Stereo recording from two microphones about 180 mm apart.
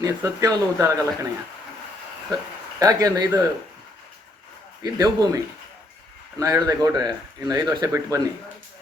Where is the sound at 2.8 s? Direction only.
20° right (ahead or behind).